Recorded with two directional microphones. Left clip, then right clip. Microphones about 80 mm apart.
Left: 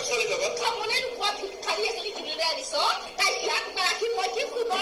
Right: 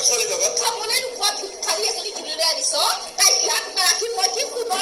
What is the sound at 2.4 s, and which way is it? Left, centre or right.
Music, right.